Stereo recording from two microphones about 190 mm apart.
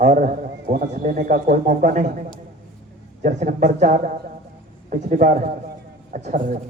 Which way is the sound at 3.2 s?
45° right (ahead or behind).